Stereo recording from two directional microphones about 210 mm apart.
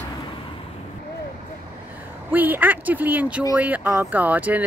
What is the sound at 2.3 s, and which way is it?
Speech, 10° right (ahead or behind).